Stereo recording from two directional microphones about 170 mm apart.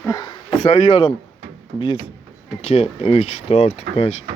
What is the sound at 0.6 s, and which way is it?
Speech, 35° left (ahead or behind).